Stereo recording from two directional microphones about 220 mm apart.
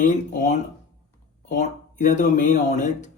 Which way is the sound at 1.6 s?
35° left (ahead or behind).